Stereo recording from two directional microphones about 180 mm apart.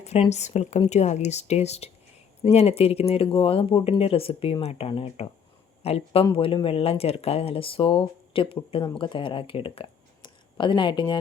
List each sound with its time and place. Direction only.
0.0 s speech: 35° left (ahead or behind)